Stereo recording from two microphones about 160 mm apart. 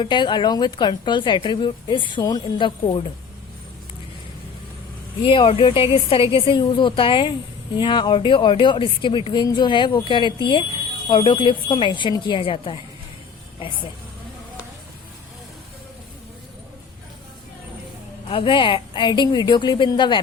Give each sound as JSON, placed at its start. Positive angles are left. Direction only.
{"t": 0.0, "sound": "speech", "side_deg": 30}
{"t": 5.2, "sound": "a woman's voice", "side_deg": 30}
{"t": 18.3, "sound": "speech", "side_deg": 30}